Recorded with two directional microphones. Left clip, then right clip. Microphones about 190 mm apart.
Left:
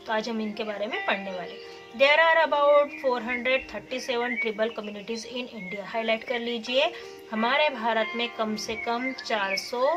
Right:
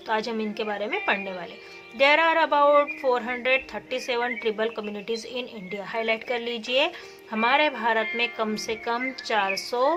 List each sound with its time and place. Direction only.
0.1 s speech: 50° right (ahead or behind)